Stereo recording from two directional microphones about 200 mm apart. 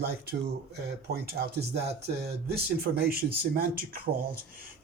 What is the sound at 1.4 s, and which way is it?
Speech, 55° right (ahead or behind).